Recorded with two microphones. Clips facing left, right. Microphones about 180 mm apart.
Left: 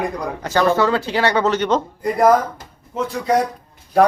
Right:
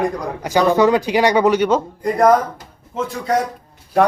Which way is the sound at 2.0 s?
Centre (ahead or behind).